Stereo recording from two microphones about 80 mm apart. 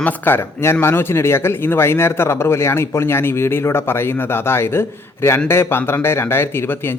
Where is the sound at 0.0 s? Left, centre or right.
Left.